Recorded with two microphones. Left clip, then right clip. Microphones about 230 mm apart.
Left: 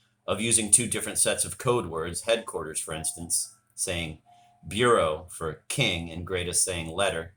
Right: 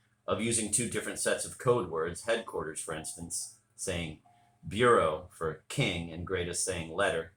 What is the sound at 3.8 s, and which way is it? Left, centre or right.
Speech, left.